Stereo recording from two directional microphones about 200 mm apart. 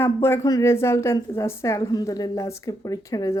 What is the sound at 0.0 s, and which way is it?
A woman's voice, 10° left (ahead or behind).